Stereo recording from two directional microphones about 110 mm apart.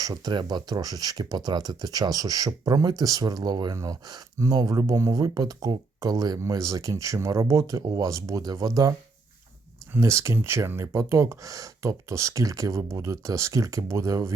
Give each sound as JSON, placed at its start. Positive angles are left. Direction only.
{"t": 0.0, "sound": "speech", "side_deg": -35}